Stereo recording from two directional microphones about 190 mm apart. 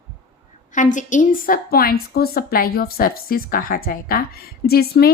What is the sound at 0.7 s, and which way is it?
A woman's voice, 40° left (ahead or behind).